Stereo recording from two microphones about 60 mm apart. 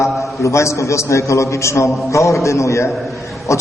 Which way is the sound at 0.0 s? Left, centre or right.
Left.